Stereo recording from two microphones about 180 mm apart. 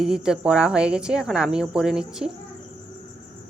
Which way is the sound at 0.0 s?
5° right (ahead or behind).